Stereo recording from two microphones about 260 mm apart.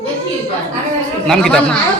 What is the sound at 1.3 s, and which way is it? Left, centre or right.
Speech, centre.